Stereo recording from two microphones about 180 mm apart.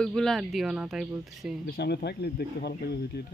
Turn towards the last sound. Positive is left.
turn(degrees=65)  # may be behind; listen again after turning